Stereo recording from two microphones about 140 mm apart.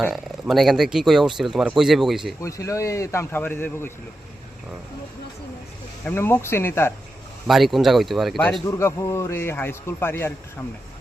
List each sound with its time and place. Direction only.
0.1 s speech: centre (ahead or behind)
2.4 s speech: 20° left (ahead or behind)
6.1 s a man's voice: 15° left (ahead or behind)
7.4 s speech: centre (ahead or behind)
8.6 s a man's voice: 20° left (ahead or behind)